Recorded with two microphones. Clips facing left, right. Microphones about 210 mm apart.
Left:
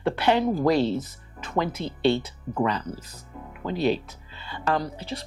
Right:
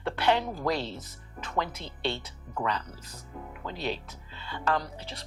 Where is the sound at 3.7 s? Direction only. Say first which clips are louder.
Left 10 dB; 10° left (ahead or behind).